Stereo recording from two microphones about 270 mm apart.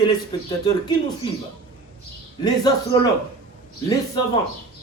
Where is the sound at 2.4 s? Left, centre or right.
Centre.